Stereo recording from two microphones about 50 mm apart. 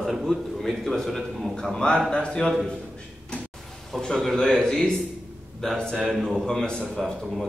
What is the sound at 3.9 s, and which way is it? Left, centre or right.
A man's voice, centre.